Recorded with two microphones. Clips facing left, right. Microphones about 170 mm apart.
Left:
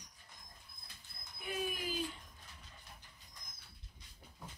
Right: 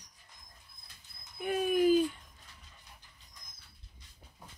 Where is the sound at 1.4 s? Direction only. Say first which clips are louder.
Right 13 dB; 50° right (ahead or behind).